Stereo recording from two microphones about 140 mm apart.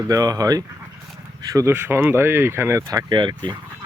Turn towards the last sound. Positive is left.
turn(degrees=-30)  # may be behind; listen again after turning